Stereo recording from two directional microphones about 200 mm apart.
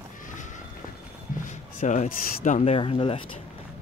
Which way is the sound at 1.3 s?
40° left (ahead or behind).